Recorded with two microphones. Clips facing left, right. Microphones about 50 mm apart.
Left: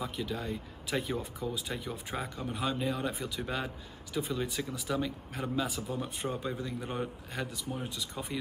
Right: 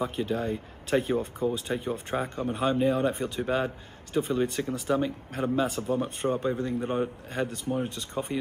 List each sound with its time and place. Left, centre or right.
0.0 s speech: right
7.3 s speech: right